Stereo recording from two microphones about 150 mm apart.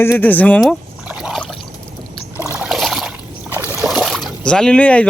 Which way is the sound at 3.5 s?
15° right (ahead or behind).